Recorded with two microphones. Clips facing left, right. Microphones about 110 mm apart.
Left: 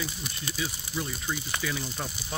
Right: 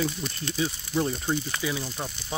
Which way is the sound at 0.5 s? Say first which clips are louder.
Right 7 dB; 25° right (ahead or behind).